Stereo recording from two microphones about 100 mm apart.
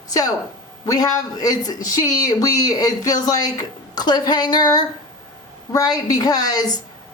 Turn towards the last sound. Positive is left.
turn(degrees=40)  # may be behind; listen again after turning